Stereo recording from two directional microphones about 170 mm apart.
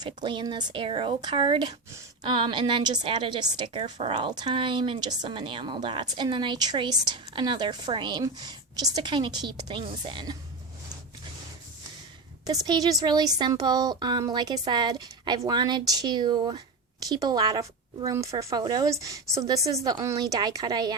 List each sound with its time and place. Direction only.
0.0 s speech: 25° right (ahead or behind)
12.5 s speech: 25° right (ahead or behind)